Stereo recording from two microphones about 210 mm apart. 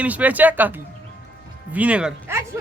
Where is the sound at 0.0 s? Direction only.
5° right (ahead or behind).